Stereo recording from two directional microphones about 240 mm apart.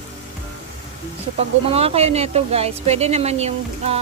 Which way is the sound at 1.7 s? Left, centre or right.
Right.